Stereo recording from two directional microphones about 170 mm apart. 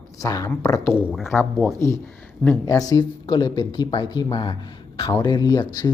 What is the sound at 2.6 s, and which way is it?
Speech, 20° left (ahead or behind).